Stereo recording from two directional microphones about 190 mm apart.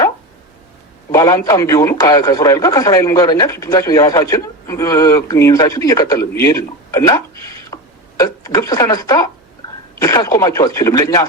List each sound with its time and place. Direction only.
1.1 s a man's voice: 15° left (ahead or behind)